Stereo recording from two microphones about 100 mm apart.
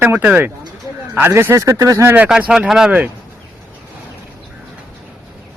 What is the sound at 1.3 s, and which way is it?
Speech, 25° right (ahead or behind).